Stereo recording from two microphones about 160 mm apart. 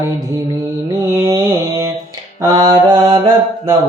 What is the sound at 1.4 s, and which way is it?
Mantra, 15° right (ahead or behind).